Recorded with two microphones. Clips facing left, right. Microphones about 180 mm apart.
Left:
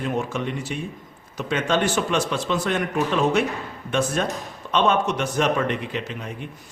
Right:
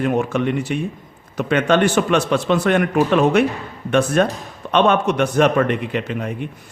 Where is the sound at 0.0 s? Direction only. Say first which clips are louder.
Right 7 dB; 65° right (ahead or behind).